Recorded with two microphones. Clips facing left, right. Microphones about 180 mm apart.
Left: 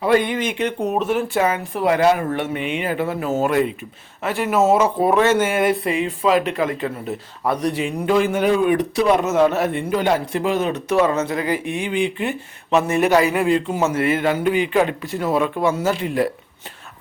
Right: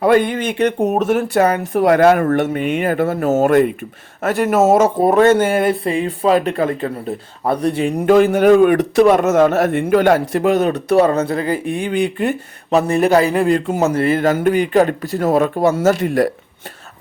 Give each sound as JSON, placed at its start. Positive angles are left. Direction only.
{"t": 0.3, "sound": "speech", "side_deg": -40}
{"t": 7.9, "sound": "speech", "side_deg": -45}